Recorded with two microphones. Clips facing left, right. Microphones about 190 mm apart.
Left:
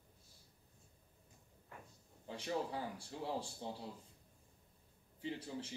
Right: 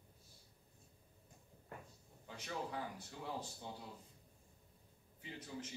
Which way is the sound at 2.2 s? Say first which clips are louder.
Left 5 dB; 30° left (ahead or behind).